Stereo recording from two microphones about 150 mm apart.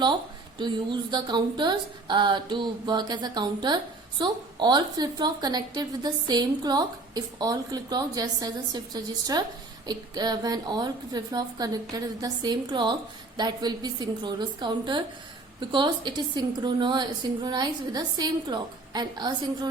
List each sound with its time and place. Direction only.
0.6 s a woman's voice: 30° right (ahead or behind)